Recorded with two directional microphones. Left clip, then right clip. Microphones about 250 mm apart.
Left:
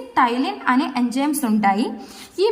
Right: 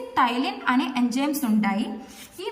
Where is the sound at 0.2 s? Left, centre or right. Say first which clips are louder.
Left 4 dB; centre.